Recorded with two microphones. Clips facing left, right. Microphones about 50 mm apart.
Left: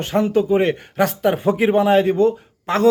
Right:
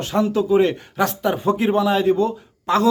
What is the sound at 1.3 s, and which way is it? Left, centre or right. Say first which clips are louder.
Speech: left 3 dB; left.